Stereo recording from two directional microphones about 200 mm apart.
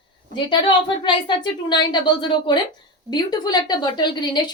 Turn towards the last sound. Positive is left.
turn(degrees=20)  # may be behind; listen again after turning